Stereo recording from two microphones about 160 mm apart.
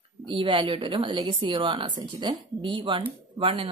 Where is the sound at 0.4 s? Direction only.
30° right (ahead or behind).